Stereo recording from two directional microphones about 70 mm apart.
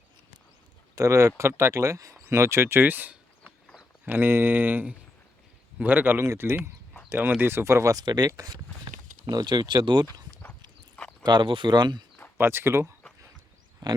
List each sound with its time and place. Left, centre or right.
0.9 s speech: right
6.2 s speech: right
7.1 s speech: right
7.9 s speech: right
12.4 s speech: right
13.8 s speech: right